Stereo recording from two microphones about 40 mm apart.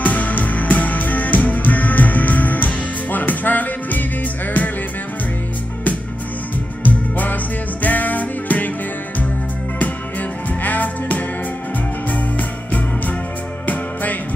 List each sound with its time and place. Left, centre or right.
0.0 s music: left
6.8 s music: left
10.6 s music: left